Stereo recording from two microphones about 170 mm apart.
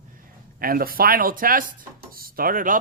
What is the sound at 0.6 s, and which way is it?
Speech, 60° right (ahead or behind).